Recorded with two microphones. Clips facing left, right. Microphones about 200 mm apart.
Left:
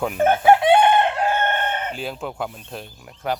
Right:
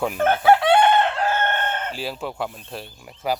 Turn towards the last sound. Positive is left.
turn(degrees=0)  # may be behind; listen again after turning